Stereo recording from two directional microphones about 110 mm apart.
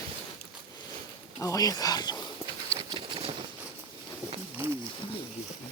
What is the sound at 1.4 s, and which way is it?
Speech, 30° left (ahead or behind).